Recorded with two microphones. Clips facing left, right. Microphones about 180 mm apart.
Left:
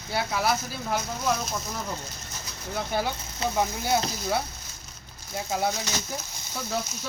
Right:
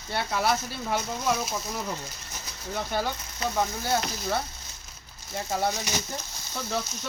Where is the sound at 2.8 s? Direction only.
10° left (ahead or behind).